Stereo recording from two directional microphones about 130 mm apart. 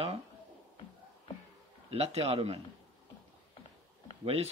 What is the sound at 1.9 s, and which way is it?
Speech, 50° right (ahead or behind).